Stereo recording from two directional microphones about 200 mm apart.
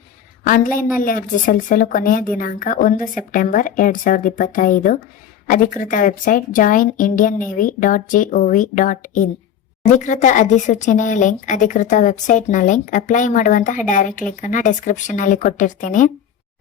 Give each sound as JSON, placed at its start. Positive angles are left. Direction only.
{"t": 0.4, "sound": "a woman's voice", "side_deg": 40}